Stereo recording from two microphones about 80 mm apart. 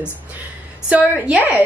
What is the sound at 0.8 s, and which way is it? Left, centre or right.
Speech, centre.